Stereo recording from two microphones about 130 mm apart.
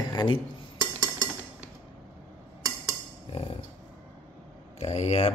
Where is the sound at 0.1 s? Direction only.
40° left (ahead or behind).